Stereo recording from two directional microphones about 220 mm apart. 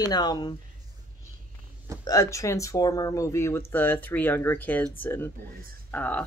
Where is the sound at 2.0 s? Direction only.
15° left (ahead or behind).